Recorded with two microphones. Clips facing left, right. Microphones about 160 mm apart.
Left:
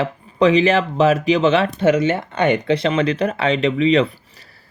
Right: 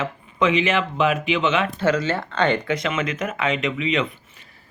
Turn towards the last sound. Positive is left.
turn(degrees=35)  # may be behind; listen again after turning